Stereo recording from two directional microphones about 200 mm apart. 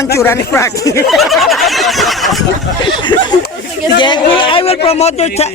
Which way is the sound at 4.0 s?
25° left (ahead or behind).